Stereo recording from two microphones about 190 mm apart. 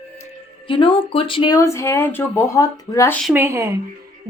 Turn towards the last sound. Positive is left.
turn(degrees=-15)  # may be behind; listen again after turning